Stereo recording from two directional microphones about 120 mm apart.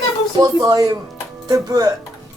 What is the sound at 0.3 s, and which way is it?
Speech, 30° right (ahead or behind).